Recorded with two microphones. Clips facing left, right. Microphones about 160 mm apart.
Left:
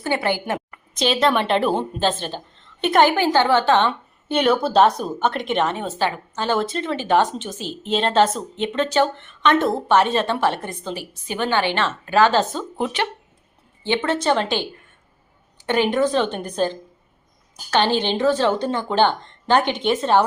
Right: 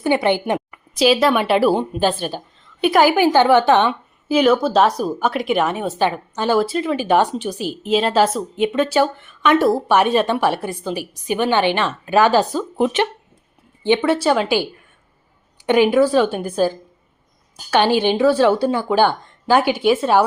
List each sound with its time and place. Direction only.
0.0 s a woman's voice: 15° right (ahead or behind)
0.9 s speech: 5° right (ahead or behind)
3.2 s speech: 15° right (ahead or behind)
4.3 s speech: centre (ahead or behind)